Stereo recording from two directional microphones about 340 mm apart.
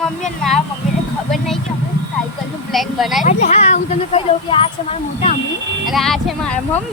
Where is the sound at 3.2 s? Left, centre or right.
Centre.